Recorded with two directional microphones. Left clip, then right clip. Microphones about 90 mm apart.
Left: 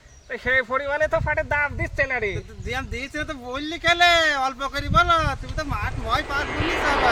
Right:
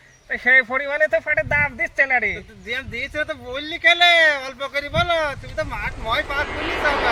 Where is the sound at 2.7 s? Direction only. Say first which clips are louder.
Right 3 dB; 60° left (ahead or behind).